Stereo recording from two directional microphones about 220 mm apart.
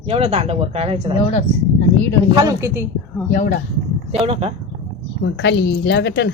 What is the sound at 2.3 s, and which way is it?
Speech, 15° right (ahead or behind).